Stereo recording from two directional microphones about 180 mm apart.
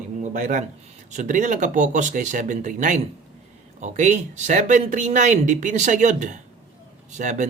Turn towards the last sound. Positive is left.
turn(degrees=-40)  # may be behind; listen again after turning